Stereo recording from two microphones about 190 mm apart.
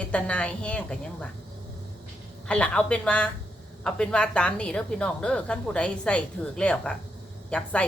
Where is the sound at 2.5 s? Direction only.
5° left (ahead or behind).